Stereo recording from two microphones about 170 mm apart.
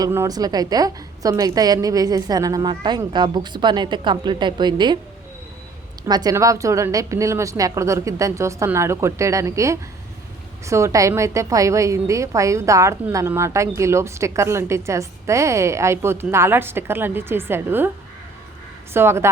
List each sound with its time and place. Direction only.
0.0 s a woman's voice: 20° right (ahead or behind)
6.1 s a woman's voice: 25° right (ahead or behind)
18.9 s a woman's voice: 15° right (ahead or behind)